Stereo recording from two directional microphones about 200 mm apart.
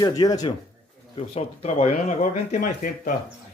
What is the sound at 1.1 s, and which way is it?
Speech, 30° left (ahead or behind).